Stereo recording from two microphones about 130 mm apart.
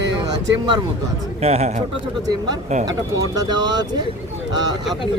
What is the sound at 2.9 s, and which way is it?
Speech, 30° right (ahead or behind).